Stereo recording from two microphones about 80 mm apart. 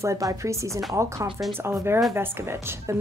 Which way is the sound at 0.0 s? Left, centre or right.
Right.